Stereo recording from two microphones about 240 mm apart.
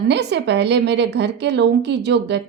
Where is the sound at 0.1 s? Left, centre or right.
Right.